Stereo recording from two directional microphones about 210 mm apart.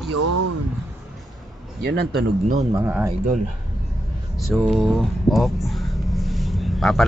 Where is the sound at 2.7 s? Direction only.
10° right (ahead or behind).